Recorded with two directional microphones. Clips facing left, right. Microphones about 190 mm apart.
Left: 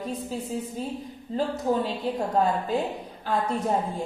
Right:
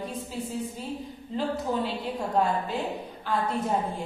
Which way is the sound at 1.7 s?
45° left (ahead or behind).